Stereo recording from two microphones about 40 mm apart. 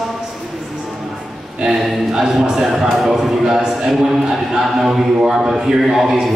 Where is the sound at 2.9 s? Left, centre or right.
Centre.